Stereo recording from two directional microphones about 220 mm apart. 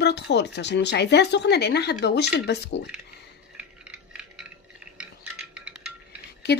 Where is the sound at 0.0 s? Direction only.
50° left (ahead or behind).